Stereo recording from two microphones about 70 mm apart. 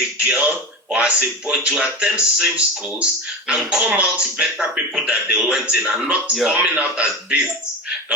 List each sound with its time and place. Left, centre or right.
0.2 s a man's voice: centre